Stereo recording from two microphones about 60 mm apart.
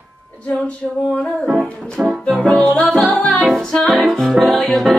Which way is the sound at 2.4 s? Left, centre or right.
Centre.